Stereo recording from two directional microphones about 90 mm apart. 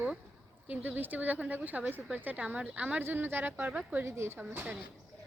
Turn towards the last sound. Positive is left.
turn(degrees=-25)  # may be behind; listen again after turning